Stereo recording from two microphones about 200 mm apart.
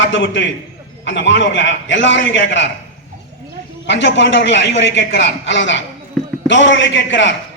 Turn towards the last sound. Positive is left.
turn(degrees=65)  # may be behind; listen again after turning